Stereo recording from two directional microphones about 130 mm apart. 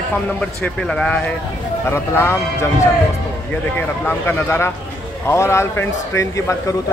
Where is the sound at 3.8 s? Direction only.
15° left (ahead or behind).